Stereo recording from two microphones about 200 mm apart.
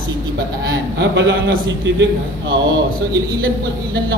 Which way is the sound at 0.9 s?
60° right (ahead or behind).